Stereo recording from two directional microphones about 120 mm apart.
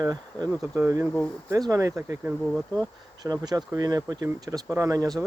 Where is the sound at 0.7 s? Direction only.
25° right (ahead or behind).